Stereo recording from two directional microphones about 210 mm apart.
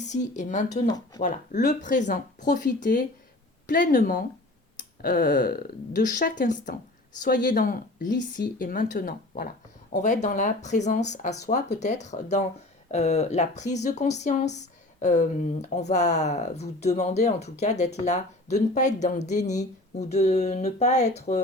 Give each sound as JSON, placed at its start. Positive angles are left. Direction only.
{"t": 0.0, "sound": "speech", "side_deg": 35}
{"t": 0.9, "sound": "speech", "side_deg": 20}
{"t": 1.2, "sound": "speech", "side_deg": 35}
{"t": 4.8, "sound": "speech", "side_deg": 50}